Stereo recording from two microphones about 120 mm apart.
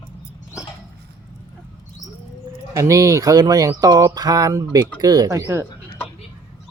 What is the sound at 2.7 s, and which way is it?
A man's voice, 25° right (ahead or behind).